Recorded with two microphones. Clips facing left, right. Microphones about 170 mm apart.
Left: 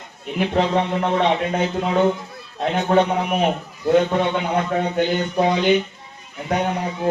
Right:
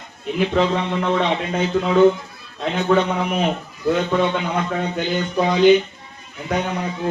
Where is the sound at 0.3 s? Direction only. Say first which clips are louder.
Even; 55° left (ahead or behind).